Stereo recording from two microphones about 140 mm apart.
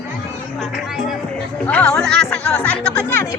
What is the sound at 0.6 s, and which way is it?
Speech, centre (ahead or behind).